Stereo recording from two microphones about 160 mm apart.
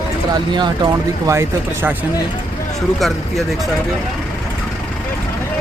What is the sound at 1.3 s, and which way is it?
Speech, 15° right (ahead or behind).